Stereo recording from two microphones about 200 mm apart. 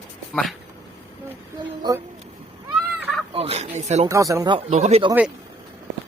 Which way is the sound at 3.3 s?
30° right (ahead or behind).